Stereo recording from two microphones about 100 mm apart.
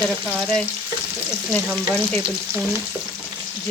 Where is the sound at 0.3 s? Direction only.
Centre (ahead or behind).